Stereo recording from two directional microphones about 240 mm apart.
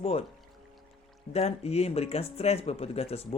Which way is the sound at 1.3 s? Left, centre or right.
Left.